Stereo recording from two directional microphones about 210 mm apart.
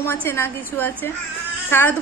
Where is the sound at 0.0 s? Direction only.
10° left (ahead or behind).